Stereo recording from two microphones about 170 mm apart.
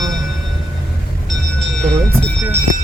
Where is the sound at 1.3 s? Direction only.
Centre (ahead or behind).